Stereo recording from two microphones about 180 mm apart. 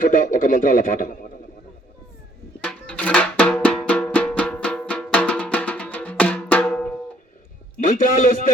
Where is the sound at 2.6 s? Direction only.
5° left (ahead or behind).